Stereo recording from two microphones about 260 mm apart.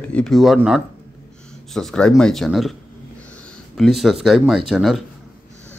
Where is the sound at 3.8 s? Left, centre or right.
Centre.